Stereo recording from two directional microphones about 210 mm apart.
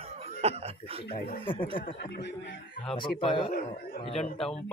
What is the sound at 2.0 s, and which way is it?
Speech, 55° left (ahead or behind).